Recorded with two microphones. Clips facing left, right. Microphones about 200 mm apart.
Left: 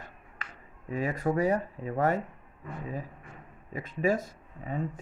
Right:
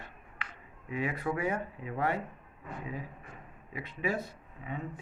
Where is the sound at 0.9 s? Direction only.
40° left (ahead or behind).